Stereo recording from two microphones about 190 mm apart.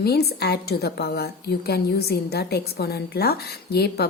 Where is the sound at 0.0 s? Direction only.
55° left (ahead or behind).